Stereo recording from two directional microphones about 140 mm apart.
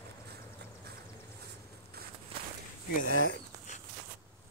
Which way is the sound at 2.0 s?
90° right.